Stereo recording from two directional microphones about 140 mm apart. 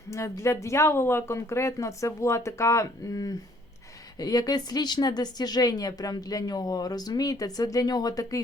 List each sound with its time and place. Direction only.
0.1 s speech: 20° left (ahead or behind)